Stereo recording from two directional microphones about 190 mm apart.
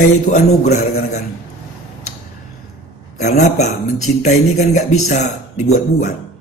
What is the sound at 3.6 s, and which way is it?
A man's voice, 35° left (ahead or behind).